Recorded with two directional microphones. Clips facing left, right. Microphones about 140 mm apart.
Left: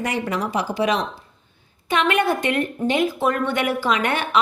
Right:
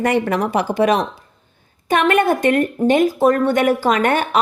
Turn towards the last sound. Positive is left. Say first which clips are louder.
# right 4 dB
turn(degrees=-45)  # may be behind; listen again after turning